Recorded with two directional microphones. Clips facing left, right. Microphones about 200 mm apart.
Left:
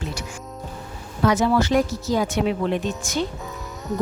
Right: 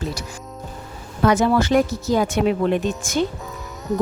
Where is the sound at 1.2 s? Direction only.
55° right (ahead or behind).